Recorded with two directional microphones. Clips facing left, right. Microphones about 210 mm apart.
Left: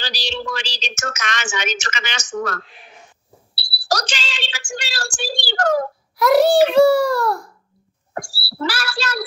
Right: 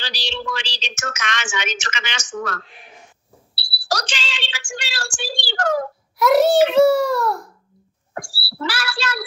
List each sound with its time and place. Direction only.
0.0 s a woman's voice: 40° left (ahead or behind)
6.1 s a child's voice: centre (ahead or behind)
8.1 s speech: 40° left (ahead or behind)